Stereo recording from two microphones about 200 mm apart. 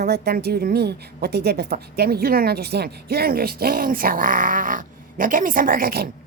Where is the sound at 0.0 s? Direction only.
50° right (ahead or behind).